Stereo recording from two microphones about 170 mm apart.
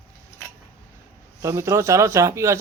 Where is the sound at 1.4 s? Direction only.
15° right (ahead or behind).